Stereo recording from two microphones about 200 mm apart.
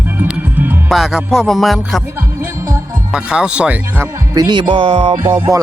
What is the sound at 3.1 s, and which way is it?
Speech, 5° right (ahead or behind).